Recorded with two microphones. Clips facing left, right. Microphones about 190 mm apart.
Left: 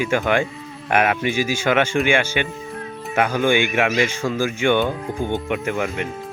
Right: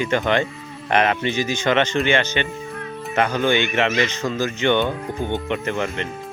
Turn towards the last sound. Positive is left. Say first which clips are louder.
# left 1 dB
turn(degrees=10)  # may be behind; listen again after turning